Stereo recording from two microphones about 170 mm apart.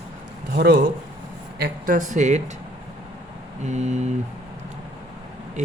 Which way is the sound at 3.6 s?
45° right (ahead or behind).